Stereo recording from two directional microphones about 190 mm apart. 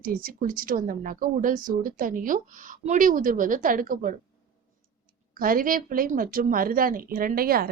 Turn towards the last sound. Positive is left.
turn(degrees=-50)  # may be behind; listen again after turning